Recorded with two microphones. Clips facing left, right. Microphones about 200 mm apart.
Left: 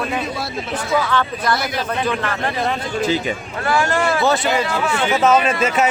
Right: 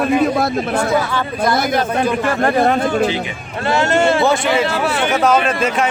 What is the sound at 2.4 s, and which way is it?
Speech, 50° right (ahead or behind).